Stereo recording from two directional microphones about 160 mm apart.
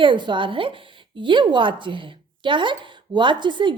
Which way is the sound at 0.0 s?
30° right (ahead or behind).